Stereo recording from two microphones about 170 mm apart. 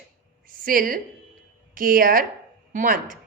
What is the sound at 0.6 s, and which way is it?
A woman's voice, 55° right (ahead or behind).